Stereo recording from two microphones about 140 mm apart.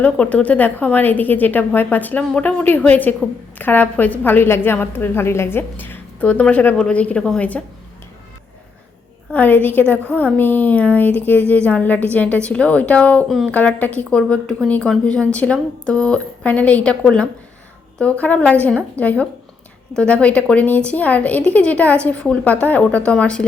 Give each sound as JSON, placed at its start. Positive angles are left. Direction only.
{"t": 0.0, "sound": "a woman's voice", "side_deg": 10}
{"t": 9.3, "sound": "a woman's voice", "side_deg": 10}
{"t": 13.2, "sound": "speech", "side_deg": 0}
{"t": 13.5, "sound": "a woman's voice", "side_deg": 10}